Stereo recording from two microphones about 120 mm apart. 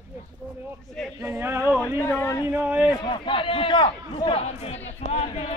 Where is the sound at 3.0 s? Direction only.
40° left (ahead or behind).